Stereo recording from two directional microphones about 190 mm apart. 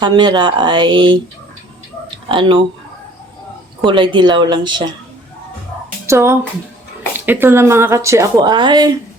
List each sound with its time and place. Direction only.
0.0 s speech: 25° right (ahead or behind)
2.0 s tick-tock: 25° right (ahead or behind)
3.8 s speech: 25° right (ahead or behind)
6.1 s speech: 15° right (ahead or behind)